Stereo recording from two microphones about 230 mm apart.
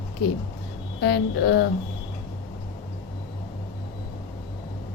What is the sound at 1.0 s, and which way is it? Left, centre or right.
Speech, left.